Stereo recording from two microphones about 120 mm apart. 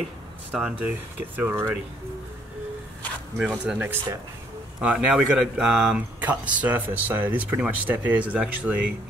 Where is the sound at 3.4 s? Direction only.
10° right (ahead or behind).